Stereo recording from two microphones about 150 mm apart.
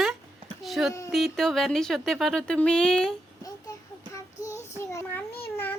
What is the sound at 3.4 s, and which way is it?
Child singing, 20° left (ahead or behind).